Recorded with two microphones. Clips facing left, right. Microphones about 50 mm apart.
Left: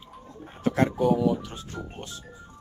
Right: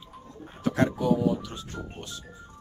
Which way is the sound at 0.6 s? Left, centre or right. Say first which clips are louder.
Left 1 dB; left.